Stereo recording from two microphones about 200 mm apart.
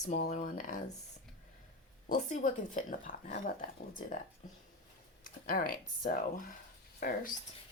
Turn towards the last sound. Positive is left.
turn(degrees=45)  # may be behind; listen again after turning